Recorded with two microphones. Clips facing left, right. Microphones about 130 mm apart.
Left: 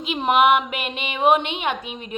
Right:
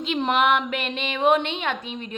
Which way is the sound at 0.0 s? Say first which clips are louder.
Left 3 dB; 10° left (ahead or behind).